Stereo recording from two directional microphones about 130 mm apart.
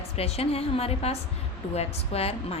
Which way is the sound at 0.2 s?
50° left (ahead or behind).